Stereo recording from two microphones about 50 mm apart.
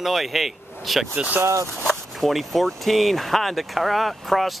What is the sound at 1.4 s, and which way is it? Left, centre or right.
Speech, right.